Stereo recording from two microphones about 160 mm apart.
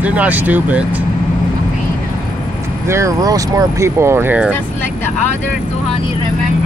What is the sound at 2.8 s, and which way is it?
Speech, 20° right (ahead or behind).